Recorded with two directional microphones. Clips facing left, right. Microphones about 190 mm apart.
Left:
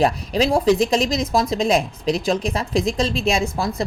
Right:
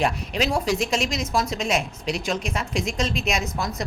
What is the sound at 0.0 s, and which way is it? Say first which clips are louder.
Speech: left 5 dB; 35° left (ahead or behind).